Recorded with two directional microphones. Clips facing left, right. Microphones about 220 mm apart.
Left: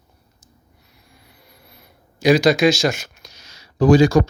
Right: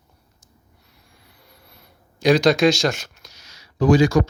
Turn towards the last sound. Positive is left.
turn(degrees=35)  # may be behind; listen again after turning